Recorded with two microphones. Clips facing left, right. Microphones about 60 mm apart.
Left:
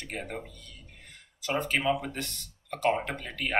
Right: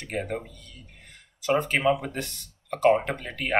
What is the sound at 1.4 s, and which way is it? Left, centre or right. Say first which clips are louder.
Speech: right 5 dB; right.